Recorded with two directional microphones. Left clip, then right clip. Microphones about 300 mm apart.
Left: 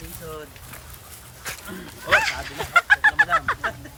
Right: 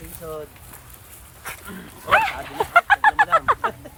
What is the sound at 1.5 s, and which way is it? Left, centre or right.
Livestock, centre.